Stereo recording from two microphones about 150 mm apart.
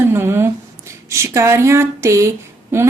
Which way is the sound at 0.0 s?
15° right (ahead or behind).